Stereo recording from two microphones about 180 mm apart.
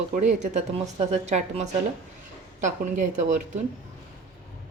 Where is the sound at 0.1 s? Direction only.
45° right (ahead or behind).